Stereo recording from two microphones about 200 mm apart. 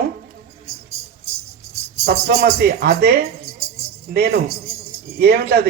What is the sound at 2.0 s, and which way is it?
Speech, 50° right (ahead or behind).